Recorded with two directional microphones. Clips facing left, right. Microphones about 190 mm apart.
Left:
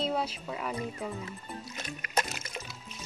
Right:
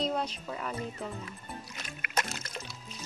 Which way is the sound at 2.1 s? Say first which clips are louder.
Left 2 dB; 10° left (ahead or behind).